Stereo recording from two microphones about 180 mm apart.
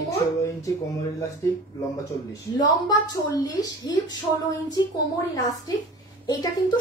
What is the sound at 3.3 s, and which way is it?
Speech, 20° left (ahead or behind).